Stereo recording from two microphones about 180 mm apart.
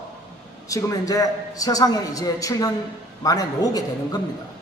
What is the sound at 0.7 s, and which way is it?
A man's voice, 20° left (ahead or behind).